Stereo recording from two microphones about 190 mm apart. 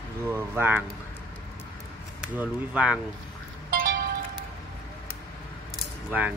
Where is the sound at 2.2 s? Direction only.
10° right (ahead or behind).